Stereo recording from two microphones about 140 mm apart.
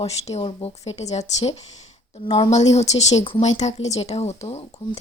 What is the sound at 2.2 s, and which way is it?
Speech, 45° left (ahead or behind).